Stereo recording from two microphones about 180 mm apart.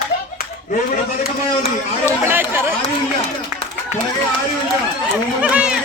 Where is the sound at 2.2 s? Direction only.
10° right (ahead or behind).